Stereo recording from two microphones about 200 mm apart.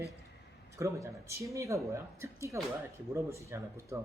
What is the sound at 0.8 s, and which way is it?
Speech, 15° right (ahead or behind).